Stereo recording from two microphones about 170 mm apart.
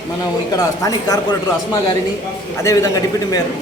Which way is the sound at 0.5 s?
20° left (ahead or behind).